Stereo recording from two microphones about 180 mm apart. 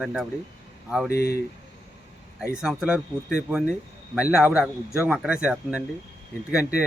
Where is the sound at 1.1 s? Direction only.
60° left (ahead or behind).